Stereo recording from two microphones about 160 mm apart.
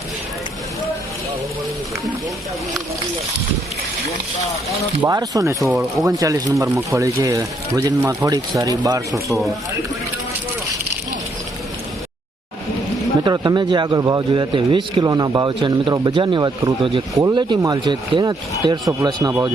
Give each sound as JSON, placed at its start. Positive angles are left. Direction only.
{"t": 5.0, "sound": "a man's voice", "side_deg": -25}
{"t": 13.2, "sound": "a man's voice", "side_deg": -25}